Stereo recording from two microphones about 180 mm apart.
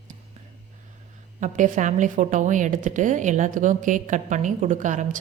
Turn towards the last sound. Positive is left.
turn(degrees=-45)  # may be behind; listen again after turning